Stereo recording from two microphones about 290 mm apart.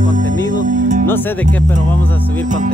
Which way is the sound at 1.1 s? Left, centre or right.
Centre.